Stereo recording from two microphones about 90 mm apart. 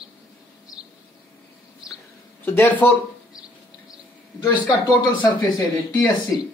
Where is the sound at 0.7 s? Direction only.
10° right (ahead or behind).